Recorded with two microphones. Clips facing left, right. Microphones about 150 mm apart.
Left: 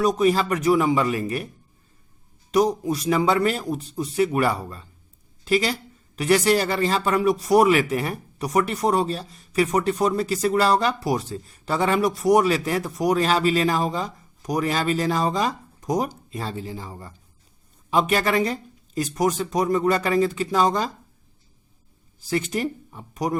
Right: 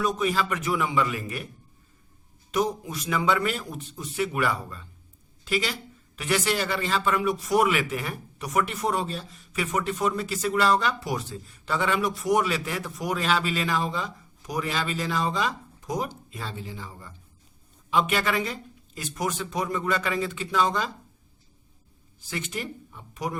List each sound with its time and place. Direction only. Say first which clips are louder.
0.0 s speech: left 6 dB; 40° left (ahead or behind)
2.5 s speech: left 7 dB; 35° left (ahead or behind)
22.2 s speech: left 9 dB; 40° left (ahead or behind)